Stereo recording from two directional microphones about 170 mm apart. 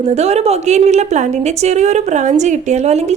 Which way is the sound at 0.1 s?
40° right (ahead or behind).